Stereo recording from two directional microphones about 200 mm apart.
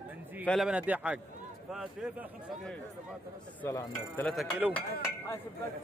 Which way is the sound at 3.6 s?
10° left (ahead or behind).